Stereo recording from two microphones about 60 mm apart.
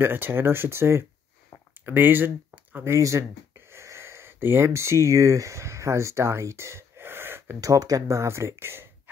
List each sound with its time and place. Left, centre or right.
0.0 s speech: right
1.9 s speech: right
2.8 s speech: right
3.7 s a sound: right
4.6 s speech: right
7.6 s speech: right
8.2 s speech: right